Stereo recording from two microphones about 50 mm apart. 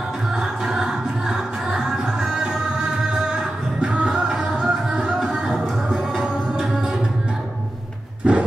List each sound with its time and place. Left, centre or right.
0.4 s music: centre
8.2 s roar: centre